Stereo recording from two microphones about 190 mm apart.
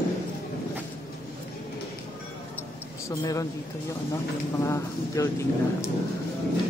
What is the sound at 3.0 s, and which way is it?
Speech, 15° left (ahead or behind).